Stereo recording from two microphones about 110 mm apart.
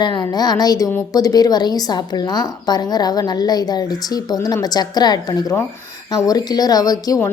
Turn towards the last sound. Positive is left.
turn(degrees=35)  # may be behind; listen again after turning